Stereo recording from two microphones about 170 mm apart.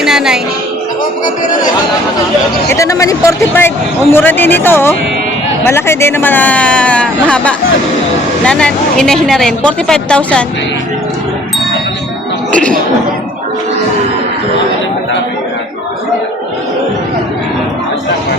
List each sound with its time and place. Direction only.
0.0 s music: 5° right (ahead or behind)
2.7 s a woman's voice: 20° left (ahead or behind)
12.5 s music: 5° left (ahead or behind)